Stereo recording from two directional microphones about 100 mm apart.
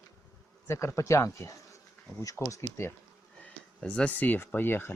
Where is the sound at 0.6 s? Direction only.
25° left (ahead or behind).